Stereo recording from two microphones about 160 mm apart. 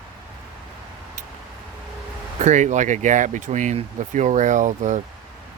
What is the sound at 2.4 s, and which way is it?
Speech, 50° right (ahead or behind).